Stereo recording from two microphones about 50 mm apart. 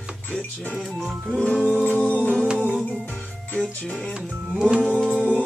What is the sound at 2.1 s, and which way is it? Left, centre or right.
Music, left.